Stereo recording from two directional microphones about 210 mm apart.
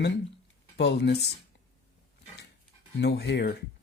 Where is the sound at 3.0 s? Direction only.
55° left (ahead or behind).